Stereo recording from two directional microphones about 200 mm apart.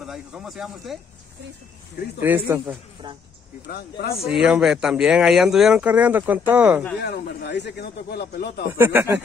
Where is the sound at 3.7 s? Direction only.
50° left (ahead or behind).